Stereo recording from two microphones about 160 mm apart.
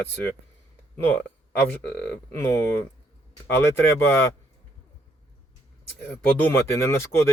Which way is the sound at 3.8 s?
15° left (ahead or behind).